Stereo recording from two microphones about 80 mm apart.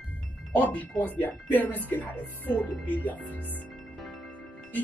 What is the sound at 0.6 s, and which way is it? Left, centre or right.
Speech, left.